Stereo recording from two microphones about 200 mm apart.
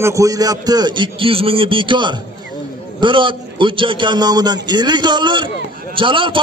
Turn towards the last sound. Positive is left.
turn(degrees=-25)  # may be behind; listen again after turning